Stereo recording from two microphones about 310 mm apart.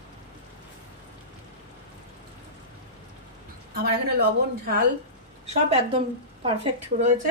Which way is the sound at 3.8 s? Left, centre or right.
Right.